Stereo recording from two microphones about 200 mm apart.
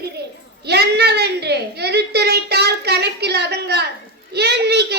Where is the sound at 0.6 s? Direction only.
55° right (ahead or behind).